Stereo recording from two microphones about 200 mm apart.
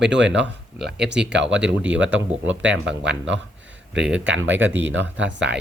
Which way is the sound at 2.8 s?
60° right (ahead or behind).